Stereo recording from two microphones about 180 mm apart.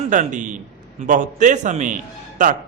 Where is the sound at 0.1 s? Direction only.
45° right (ahead or behind).